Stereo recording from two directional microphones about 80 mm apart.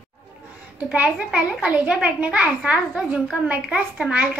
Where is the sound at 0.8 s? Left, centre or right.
Centre.